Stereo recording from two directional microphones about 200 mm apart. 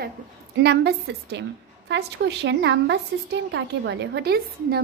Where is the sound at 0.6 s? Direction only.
55° right (ahead or behind).